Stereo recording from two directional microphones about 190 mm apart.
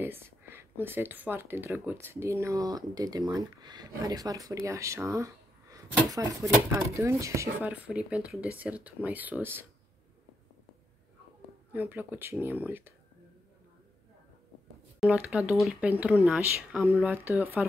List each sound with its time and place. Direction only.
0.0 s speech: 10° right (ahead or behind)
11.7 s speech: 10° right (ahead or behind)
15.0 s speech: 5° right (ahead or behind)